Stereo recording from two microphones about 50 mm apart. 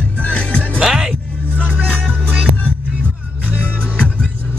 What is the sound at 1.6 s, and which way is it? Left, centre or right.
Music, right.